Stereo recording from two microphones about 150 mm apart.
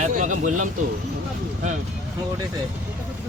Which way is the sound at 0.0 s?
55° right (ahead or behind).